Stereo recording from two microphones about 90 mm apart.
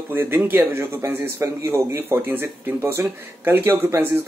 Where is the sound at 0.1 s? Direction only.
25° right (ahead or behind).